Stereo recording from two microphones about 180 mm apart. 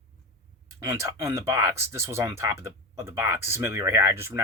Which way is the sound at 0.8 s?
15° right (ahead or behind).